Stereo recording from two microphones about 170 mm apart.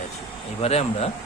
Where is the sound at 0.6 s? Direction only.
35° left (ahead or behind).